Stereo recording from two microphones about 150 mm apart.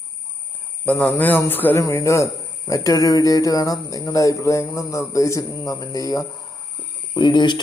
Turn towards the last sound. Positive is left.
turn(degrees=30)  # may be behind; listen again after turning